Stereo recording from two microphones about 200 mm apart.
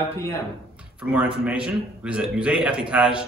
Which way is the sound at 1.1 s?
5° right (ahead or behind).